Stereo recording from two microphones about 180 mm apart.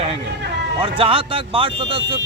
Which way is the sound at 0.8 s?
30° right (ahead or behind).